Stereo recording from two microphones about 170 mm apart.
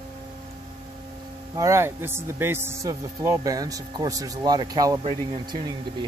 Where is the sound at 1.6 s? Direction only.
15° right (ahead or behind).